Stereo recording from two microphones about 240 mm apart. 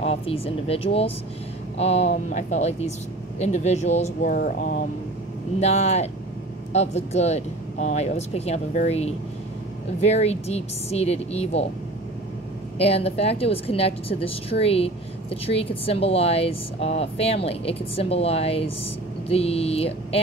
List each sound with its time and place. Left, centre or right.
0.0 s a woman's voice: left
12.7 s a woman's voice: left